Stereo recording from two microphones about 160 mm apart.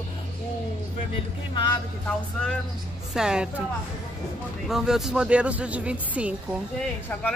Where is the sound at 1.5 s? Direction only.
30° left (ahead or behind).